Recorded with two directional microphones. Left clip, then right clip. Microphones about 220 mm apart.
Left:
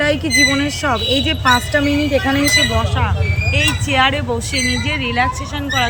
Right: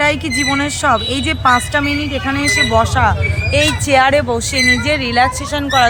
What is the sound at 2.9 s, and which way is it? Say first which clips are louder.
Speech: right 6 dB; 20° right (ahead or behind).